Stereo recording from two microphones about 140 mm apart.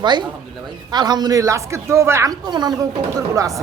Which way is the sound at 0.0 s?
30° right (ahead or behind).